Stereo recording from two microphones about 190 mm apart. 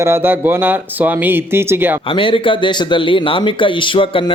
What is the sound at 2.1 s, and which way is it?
Speech, 25° left (ahead or behind).